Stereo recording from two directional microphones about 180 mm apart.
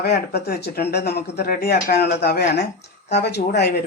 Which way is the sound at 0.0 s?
65° left (ahead or behind).